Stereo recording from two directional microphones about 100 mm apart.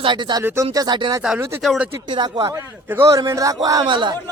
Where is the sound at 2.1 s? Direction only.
40° right (ahead or behind).